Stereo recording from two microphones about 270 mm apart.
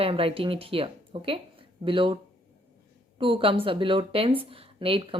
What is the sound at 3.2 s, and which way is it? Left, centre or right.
A woman's voice, centre.